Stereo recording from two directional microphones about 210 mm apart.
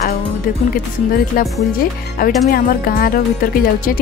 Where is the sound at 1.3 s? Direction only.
45° left (ahead or behind).